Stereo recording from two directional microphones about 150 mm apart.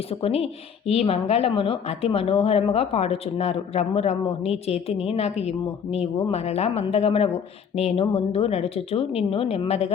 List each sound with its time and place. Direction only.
0.2 s a woman's voice: 40° left (ahead or behind)